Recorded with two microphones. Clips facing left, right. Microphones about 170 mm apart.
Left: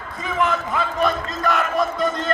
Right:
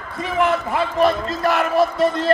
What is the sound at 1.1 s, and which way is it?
A man's voice, 30° right (ahead or behind).